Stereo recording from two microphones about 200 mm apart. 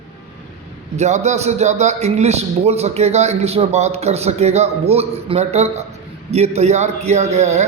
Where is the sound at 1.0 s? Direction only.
35° right (ahead or behind).